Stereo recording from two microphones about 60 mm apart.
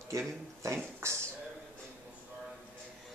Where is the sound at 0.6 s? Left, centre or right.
Right.